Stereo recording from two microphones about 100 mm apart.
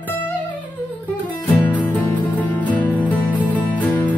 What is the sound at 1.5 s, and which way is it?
Music, 15° left (ahead or behind).